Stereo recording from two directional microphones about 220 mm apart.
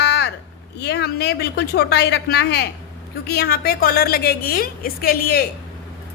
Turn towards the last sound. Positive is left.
turn(degrees=45)  # may be behind; listen again after turning